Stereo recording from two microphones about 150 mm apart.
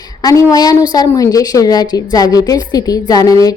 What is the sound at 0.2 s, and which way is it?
A woman's voice, 25° left (ahead or behind).